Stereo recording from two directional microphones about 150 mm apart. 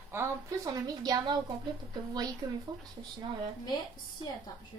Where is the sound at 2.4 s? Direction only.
30° right (ahead or behind).